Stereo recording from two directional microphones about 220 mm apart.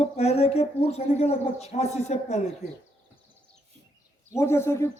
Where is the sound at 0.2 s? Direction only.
30° left (ahead or behind).